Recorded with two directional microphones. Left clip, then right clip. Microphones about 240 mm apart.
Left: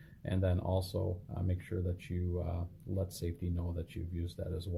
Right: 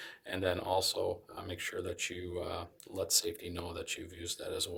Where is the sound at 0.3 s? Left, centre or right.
Right.